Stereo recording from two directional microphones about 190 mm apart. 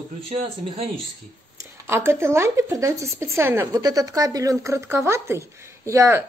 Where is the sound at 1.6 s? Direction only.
15° right (ahead or behind).